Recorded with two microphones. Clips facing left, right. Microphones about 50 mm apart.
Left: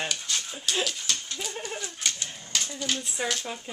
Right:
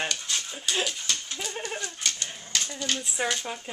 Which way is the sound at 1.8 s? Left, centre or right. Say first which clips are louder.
Right 1 dB; centre.